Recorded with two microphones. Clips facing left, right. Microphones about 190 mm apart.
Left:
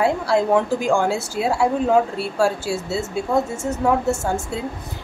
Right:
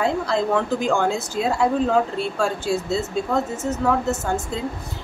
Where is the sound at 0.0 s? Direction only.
10° left (ahead or behind).